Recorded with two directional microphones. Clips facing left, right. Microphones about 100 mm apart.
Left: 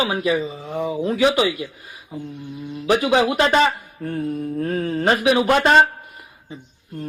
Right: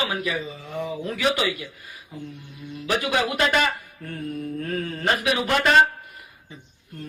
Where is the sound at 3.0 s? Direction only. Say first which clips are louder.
Left 4 dB; 25° left (ahead or behind).